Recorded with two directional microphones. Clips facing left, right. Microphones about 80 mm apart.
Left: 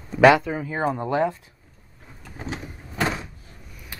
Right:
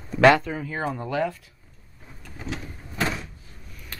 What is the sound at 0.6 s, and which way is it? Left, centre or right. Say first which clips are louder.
Speech: left 4 dB; left.